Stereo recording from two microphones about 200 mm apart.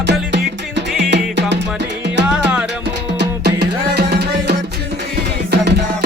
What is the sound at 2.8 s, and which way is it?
Music, 55° right (ahead or behind).